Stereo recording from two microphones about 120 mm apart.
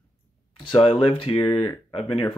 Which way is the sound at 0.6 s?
45° left (ahead or behind).